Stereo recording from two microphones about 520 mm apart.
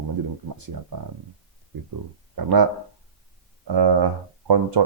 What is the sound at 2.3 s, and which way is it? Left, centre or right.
Speech, right.